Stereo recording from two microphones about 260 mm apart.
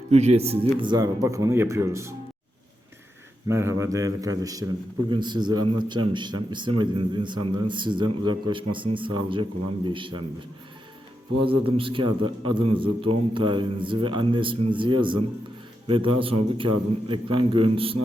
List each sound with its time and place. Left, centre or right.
0.1 s speech: right
3.5 s speech: centre
11.4 s a man's voice: centre